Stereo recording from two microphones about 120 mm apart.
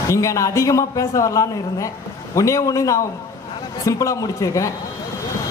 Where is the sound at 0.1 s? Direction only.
25° left (ahead or behind).